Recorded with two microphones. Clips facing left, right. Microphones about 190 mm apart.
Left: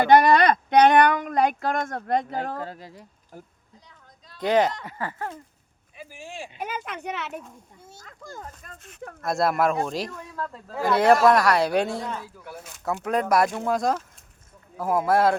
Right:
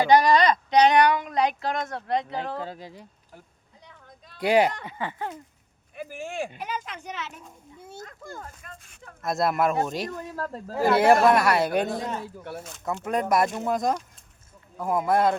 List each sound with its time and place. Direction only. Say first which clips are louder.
0.0 s a sound: left 2 dB; 55° left (ahead or behind)
2.7 s speech: right 2 dB; 25° right (ahead or behind)
3.8 s a sound: right 6 dB; 60° right (ahead or behind)
4.4 s speech: even; 10° right (ahead or behind)
6.0 s speech: right 7 dB; 55° right (ahead or behind)
6.6 s speech: left 2 dB; 55° left (ahead or behind)
7.9 s a sound: right 9 dB; 60° right (ahead or behind)
9.2 s speech: left 1 dB; centre (ahead or behind)
10.3 s speech: right 1 dB; 40° right (ahead or behind)
10.8 s speech: even; 5° right (ahead or behind)
11.9 s speech: right 1 dB; 20° right (ahead or behind)
12.8 s speech: left 2 dB; centre (ahead or behind)